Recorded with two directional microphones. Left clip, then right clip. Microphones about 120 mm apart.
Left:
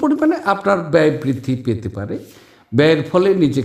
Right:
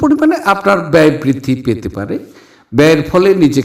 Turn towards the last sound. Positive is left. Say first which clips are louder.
# right 5 dB
turn(degrees=-40)  # may be behind; listen again after turning